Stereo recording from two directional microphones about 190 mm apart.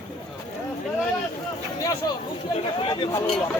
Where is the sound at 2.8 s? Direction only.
30° left (ahead or behind).